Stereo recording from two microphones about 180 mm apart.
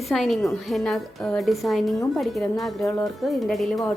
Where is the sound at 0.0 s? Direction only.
Centre (ahead or behind).